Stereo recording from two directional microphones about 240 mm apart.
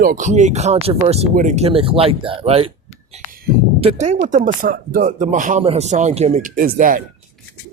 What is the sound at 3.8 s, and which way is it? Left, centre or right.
Speech, right.